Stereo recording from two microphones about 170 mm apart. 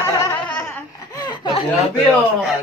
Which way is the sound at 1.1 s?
25° left (ahead or behind).